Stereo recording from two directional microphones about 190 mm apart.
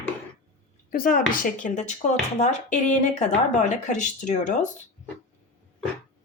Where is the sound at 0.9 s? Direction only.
50° left (ahead or behind).